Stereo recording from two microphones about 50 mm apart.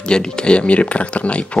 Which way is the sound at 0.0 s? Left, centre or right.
Centre.